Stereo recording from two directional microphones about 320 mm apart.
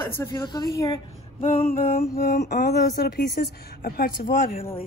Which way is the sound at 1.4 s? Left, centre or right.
Left.